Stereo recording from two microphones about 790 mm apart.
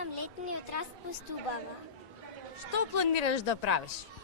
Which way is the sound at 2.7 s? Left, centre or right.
Left.